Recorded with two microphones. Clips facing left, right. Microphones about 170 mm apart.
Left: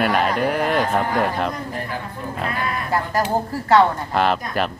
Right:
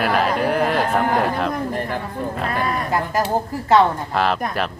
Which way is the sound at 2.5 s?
40° right (ahead or behind).